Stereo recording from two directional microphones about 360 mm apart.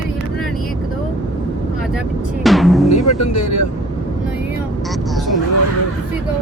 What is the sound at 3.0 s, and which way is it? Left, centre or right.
Speech, left.